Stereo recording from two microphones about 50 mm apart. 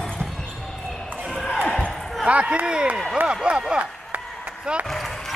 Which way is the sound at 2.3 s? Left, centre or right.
Right.